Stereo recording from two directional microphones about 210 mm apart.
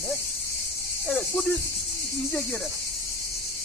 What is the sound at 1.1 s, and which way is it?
Cricket, 10° left (ahead or behind).